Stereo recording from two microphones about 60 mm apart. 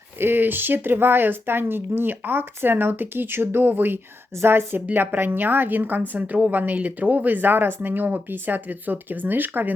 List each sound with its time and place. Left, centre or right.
0.2 s a woman's voice: right